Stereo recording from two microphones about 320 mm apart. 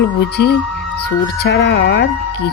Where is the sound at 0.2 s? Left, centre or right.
Left.